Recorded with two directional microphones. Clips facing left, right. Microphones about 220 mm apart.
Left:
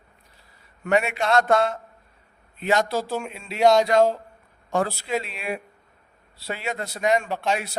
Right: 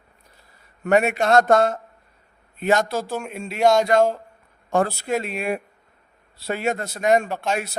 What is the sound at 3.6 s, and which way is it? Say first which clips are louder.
Speech: even; centre (ahead or behind).